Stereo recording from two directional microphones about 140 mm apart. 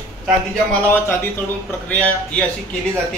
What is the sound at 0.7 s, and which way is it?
Speech, 15° left (ahead or behind).